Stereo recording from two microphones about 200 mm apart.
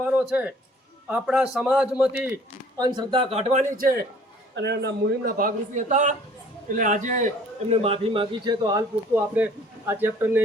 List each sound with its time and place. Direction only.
0.0 s a sound: 5° right (ahead or behind)
1.1 s a man's voice: 5° right (ahead or behind); by 3.9 s 40° right (ahead or behind)
4.5 s a man's voice: 60° right (ahead or behind); by 7.3 s 40° right (ahead or behind)
7.7 s a man's voice: 30° right (ahead or behind)
9.3 s a man's voice: 10° right (ahead or behind)